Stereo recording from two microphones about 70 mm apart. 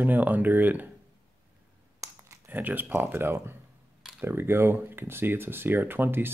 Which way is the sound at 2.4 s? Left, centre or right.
Right.